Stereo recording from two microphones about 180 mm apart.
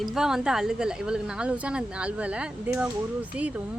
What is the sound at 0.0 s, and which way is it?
Speech, 5° right (ahead or behind).